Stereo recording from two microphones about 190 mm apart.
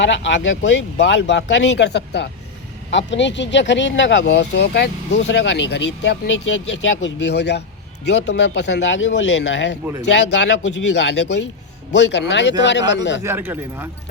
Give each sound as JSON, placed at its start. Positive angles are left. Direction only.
{"t": 0.0, "sound": "speech", "side_deg": 70}
{"t": 13.2, "sound": "speech", "side_deg": -10}